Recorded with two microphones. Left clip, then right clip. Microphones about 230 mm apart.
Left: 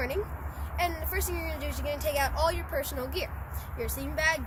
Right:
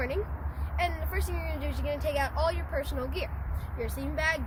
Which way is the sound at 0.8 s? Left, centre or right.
Centre.